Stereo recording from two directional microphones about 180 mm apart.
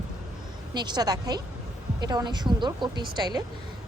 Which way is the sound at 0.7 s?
25° right (ahead or behind).